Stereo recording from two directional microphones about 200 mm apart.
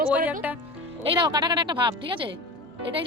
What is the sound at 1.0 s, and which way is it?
Speech, 25° right (ahead or behind).